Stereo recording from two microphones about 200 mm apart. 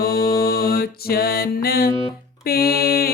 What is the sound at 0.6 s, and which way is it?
Music, 50° left (ahead or behind).